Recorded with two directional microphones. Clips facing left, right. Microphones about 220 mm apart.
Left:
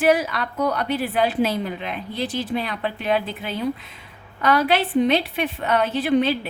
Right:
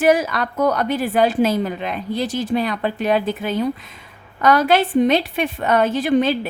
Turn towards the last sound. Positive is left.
turn(degrees=-45)  # may be behind; listen again after turning